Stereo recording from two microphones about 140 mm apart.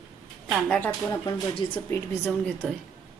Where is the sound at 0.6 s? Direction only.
10° left (ahead or behind).